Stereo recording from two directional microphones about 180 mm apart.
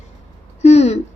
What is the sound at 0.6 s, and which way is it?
Speech, 35° left (ahead or behind).